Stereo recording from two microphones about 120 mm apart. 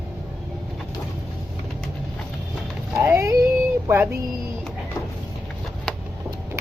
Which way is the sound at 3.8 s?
20° right (ahead or behind).